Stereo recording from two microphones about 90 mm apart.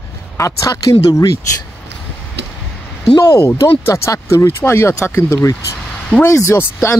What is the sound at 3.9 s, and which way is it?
Speech, 35° left (ahead or behind).